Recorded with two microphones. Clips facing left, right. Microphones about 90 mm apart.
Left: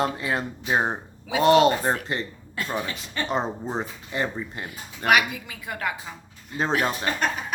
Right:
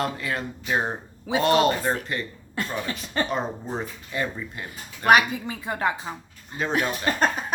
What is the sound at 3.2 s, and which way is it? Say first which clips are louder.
Speech: left 2 dB; 20° left (ahead or behind).